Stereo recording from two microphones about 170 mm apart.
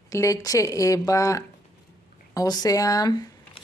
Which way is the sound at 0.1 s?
20° left (ahead or behind).